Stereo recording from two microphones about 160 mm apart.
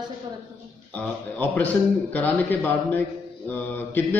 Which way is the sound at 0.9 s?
10° left (ahead or behind).